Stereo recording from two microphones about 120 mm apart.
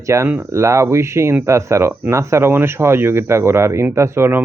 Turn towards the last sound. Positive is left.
turn(degrees=-20)  # may be behind; listen again after turning